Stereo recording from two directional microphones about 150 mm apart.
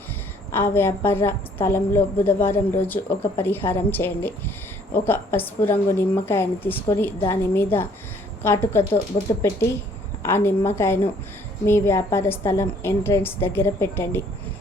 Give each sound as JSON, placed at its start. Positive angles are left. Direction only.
{"t": 0.5, "sound": "a woman's voice", "side_deg": 15}